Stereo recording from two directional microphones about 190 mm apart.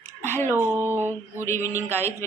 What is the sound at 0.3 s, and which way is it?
Speech, 10° left (ahead or behind).